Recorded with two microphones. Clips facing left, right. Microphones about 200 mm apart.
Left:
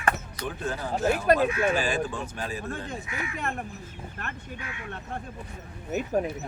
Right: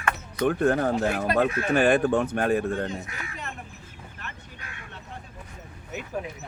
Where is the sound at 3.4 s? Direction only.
55° left (ahead or behind).